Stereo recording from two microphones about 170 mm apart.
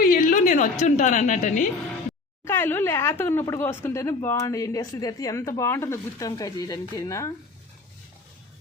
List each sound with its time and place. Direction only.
0.0 s a woman's voice: 55° left (ahead or behind)
2.4 s speech: 15° left (ahead or behind)